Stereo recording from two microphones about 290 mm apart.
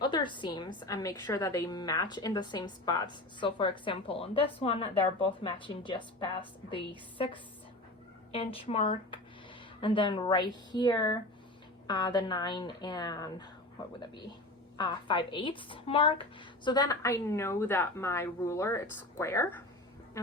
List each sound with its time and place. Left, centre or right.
0.0 s a woman's voice: centre
14.8 s a woman's voice: centre